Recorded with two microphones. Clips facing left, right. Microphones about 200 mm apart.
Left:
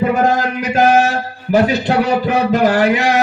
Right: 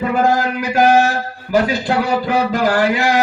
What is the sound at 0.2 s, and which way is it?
Mantra, 25° left (ahead or behind).